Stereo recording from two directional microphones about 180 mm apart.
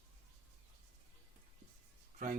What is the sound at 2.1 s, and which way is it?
Speech, 45° right (ahead or behind).